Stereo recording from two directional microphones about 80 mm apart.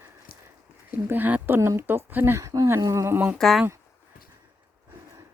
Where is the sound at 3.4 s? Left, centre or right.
Centre.